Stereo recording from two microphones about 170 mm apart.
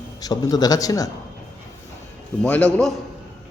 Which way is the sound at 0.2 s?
20° left (ahead or behind).